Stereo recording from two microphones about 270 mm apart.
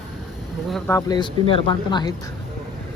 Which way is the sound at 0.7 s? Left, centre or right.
Centre.